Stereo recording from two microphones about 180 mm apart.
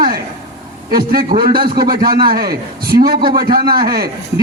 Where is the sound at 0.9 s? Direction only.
55° right (ahead or behind).